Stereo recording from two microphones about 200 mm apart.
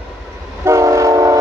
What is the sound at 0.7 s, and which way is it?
Train, 15° right (ahead or behind).